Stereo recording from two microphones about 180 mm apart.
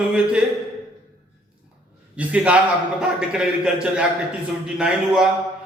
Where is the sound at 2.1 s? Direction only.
5° right (ahead or behind).